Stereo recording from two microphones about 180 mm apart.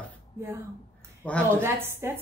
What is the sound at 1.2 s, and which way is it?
Speech, 5° left (ahead or behind).